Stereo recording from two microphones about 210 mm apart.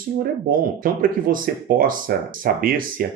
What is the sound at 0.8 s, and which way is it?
Speech, 40° right (ahead or behind).